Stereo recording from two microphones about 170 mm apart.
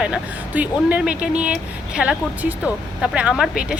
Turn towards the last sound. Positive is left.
turn(degrees=-5)  # may be behind; listen again after turning